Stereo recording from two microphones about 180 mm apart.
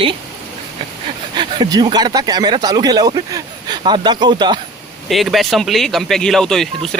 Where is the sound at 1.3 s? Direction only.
25° right (ahead or behind).